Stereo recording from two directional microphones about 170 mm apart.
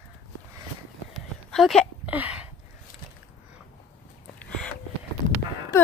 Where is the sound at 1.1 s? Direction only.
Centre (ahead or behind).